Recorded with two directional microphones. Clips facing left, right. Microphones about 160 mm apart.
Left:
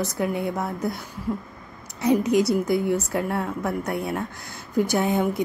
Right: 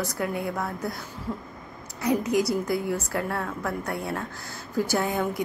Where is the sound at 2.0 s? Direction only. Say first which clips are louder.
Left 4 dB; 20° left (ahead or behind).